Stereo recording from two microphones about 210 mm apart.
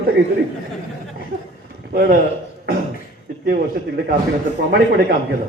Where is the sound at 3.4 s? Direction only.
50° right (ahead or behind).